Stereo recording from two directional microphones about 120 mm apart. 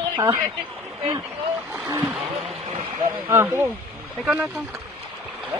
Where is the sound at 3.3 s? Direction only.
20° right (ahead or behind).